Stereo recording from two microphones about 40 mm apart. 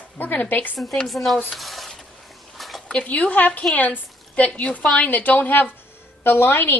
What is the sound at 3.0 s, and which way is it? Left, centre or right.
A woman's voice, left.